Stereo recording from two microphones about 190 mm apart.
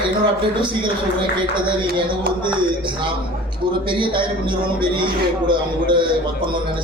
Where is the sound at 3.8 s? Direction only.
25° right (ahead or behind).